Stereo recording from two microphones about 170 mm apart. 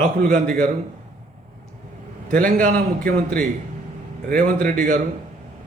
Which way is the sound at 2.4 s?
55° right (ahead or behind).